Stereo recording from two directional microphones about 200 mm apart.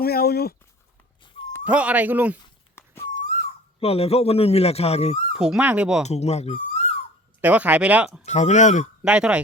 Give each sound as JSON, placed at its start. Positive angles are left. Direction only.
{"t": 0.0, "sound": "speech", "side_deg": 50}
{"t": 1.6, "sound": "speech", "side_deg": -5}
{"t": 2.7, "sound": "wail", "side_deg": 10}
{"t": 3.8, "sound": "a man's voice", "side_deg": 30}
{"t": 5.4, "sound": "speech", "side_deg": -5}
{"t": 6.1, "sound": "speech", "side_deg": 35}
{"t": 7.4, "sound": "speech", "side_deg": -5}
{"t": 8.2, "sound": "a man's voice", "side_deg": 35}
{"t": 9.0, "sound": "speech", "side_deg": -5}